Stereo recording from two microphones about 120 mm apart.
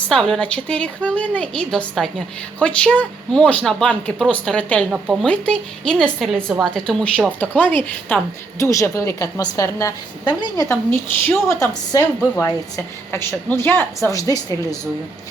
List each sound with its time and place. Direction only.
0.1 s a woman's voice: 5° left (ahead or behind)
4.9 s speech: 5° right (ahead or behind)
5.2 s a woman's voice: 10° left (ahead or behind)
8.5 s a woman's voice: 25° left (ahead or behind)
11.3 s a woman's voice: 20° left (ahead or behind)